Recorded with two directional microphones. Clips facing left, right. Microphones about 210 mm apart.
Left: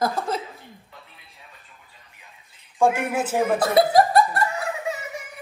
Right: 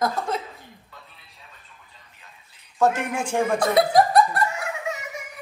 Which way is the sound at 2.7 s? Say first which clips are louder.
Left 1 dB; 10° left (ahead or behind).